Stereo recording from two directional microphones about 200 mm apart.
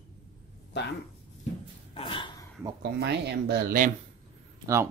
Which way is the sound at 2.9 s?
55° right (ahead or behind).